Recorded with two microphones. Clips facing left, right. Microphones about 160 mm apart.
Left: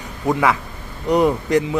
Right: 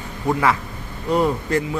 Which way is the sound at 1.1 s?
15° left (ahead or behind).